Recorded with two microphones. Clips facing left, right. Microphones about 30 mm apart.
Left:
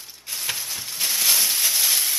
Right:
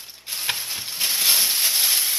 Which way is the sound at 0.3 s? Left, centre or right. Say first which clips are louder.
Right 2 dB; right.